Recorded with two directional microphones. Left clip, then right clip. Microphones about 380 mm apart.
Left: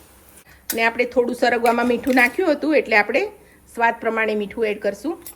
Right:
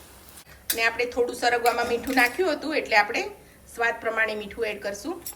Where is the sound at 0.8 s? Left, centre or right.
Centre.